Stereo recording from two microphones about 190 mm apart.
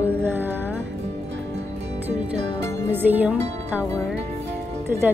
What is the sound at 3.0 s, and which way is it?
Speech, 10° right (ahead or behind).